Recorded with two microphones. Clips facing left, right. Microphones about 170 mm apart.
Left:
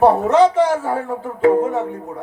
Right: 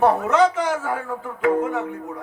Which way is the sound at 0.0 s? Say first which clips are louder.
Left 5 dB; 30° left (ahead or behind).